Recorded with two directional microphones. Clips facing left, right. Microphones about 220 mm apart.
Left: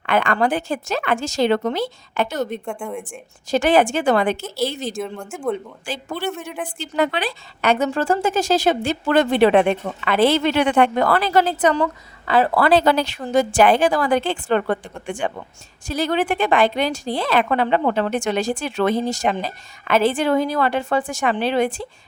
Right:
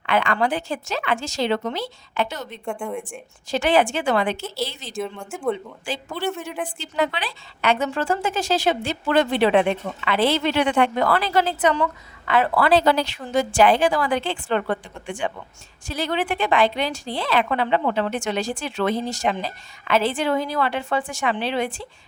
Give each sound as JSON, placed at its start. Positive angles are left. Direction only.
{"t": 0.0, "sound": "speech", "side_deg": 45}
{"t": 2.6, "sound": "speech", "side_deg": 0}
{"t": 3.1, "sound": "speech", "side_deg": 45}
{"t": 4.9, "sound": "speech", "side_deg": 0}
{"t": 6.7, "sound": "speech", "side_deg": 50}